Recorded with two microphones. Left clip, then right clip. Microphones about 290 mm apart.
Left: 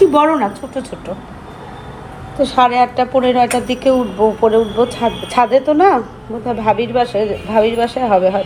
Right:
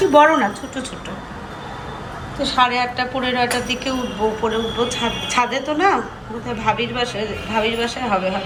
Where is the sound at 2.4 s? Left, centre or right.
Centre.